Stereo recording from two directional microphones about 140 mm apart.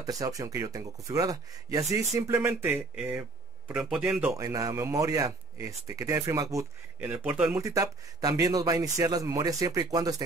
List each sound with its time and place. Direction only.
0.0 s speech: 25° right (ahead or behind)
4.4 s speech: 25° right (ahead or behind)
7.0 s speech: 15° right (ahead or behind)
7.6 s speech: 25° right (ahead or behind)